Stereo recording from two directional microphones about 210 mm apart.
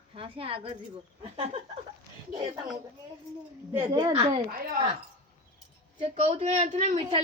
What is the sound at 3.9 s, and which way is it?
Speech, 20° right (ahead or behind).